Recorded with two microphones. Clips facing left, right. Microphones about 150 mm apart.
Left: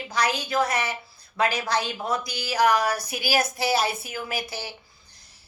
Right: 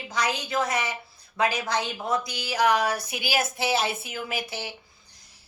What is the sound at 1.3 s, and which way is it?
A woman's voice, 20° right (ahead or behind).